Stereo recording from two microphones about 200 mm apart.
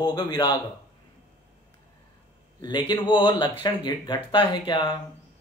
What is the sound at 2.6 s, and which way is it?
Speech, 20° left (ahead or behind).